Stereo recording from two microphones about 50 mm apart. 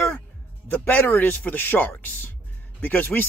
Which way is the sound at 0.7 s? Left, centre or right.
Left.